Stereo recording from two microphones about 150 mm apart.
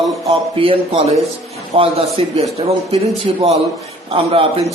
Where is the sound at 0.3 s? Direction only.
35° right (ahead or behind).